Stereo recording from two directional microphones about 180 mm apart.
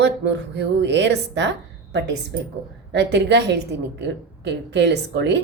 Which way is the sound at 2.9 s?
70° right (ahead or behind).